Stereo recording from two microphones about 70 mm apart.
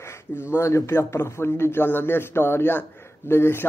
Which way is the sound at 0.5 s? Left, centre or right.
Left.